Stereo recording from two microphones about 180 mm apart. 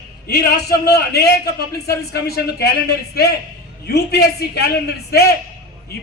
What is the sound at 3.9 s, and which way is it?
Speech, 65° left (ahead or behind).